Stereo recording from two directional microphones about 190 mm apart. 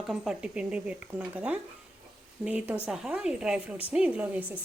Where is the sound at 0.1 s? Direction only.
5° right (ahead or behind).